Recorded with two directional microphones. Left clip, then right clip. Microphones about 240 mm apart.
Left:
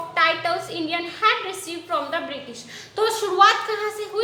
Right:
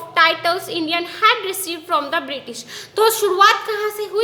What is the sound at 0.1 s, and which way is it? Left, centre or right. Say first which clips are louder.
A child's voice: right 5 dB; right.